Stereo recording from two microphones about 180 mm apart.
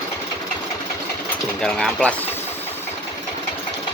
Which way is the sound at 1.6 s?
5° left (ahead or behind).